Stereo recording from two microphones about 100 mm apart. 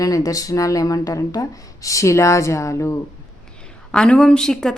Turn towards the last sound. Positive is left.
turn(degrees=5)  # may be behind; listen again after turning